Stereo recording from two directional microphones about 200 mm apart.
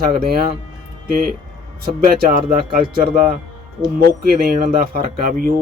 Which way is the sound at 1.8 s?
45° right (ahead or behind).